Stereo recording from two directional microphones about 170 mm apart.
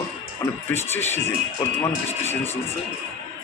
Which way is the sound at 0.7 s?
15° left (ahead or behind).